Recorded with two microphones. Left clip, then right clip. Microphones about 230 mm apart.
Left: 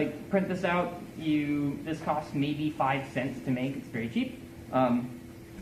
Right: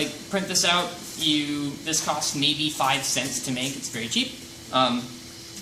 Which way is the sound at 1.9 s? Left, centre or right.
Centre.